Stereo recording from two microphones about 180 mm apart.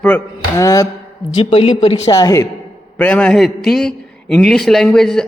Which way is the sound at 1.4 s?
30° left (ahead or behind).